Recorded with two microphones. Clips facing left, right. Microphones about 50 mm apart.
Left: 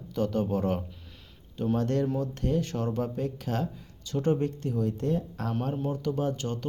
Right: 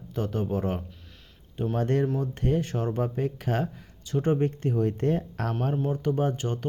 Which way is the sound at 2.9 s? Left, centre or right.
Right.